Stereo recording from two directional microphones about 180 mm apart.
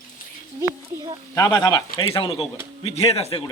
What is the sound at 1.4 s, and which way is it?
Speech, 20° left (ahead or behind).